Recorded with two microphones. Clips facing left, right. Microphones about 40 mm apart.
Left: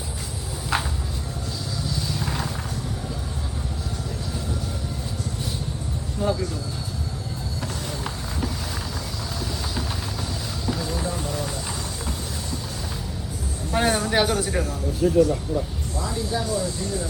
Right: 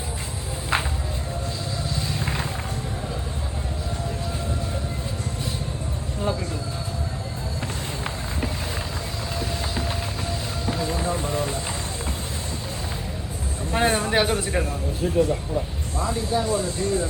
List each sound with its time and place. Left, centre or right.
0.7 s a sound: right
2.0 s vehicle: right
6.2 s a sound: right
10.7 s music: right
13.7 s vehicle: right
14.3 s a man's voice: right